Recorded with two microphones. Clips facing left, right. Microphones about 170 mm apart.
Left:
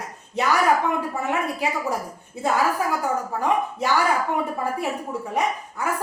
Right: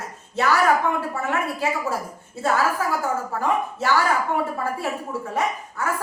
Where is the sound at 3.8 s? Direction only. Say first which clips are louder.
Right 1 dB; 15° left (ahead or behind).